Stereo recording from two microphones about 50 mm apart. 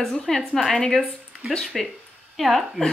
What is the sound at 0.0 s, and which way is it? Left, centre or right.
A woman's voice, centre.